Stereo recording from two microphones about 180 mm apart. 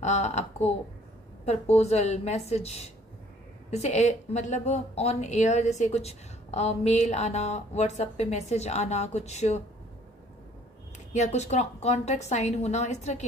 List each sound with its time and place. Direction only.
0.0 s a sound: 40° left (ahead or behind)
1.4 s speech: 35° left (ahead or behind)
11.1 s speech: 40° left (ahead or behind)